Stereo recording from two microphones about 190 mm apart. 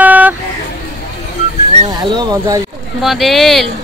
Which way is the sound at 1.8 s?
20° right (ahead or behind).